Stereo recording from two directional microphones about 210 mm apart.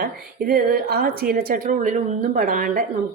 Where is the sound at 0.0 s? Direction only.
45° right (ahead or behind).